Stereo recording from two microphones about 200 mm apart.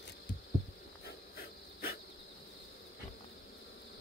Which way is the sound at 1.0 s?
50° left (ahead or behind).